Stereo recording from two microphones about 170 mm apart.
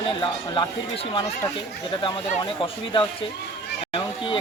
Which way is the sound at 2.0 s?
30° left (ahead or behind).